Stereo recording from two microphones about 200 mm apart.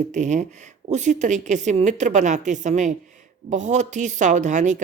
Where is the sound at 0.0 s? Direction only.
35° right (ahead or behind).